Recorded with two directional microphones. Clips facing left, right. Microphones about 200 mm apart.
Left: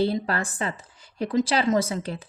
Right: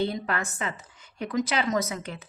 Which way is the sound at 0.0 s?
35° left (ahead or behind).